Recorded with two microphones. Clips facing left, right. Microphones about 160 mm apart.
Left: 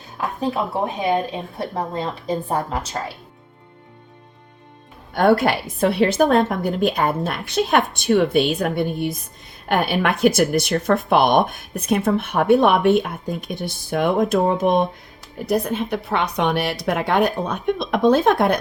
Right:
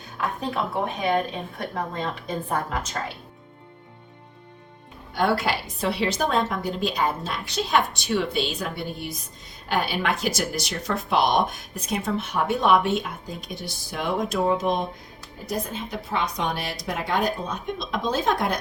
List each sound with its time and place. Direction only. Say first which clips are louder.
1.5 s a woman's voice: left 5 dB; 30° left (ahead or behind)
5.1 s speech: left 7 dB; 55° left (ahead or behind)